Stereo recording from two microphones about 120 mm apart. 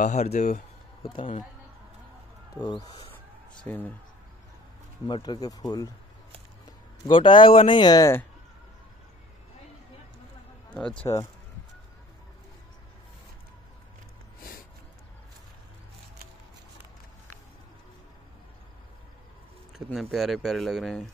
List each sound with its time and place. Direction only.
0.0 s speech: 65° left (ahead or behind)
1.0 s speech: 45° left (ahead or behind)
2.5 s speech: 35° left (ahead or behind)
3.6 s speech: 15° left (ahead or behind)
5.0 s speech: 40° left (ahead or behind)
7.1 s speech: 45° left (ahead or behind)
10.7 s speech: 10° left (ahead or behind)
19.9 s speech: centre (ahead or behind)